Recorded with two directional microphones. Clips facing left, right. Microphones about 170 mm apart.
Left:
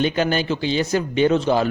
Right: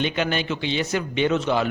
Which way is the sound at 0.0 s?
40° left (ahead or behind).